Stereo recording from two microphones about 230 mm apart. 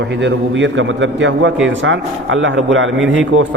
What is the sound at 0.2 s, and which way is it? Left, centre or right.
A man's voice, right.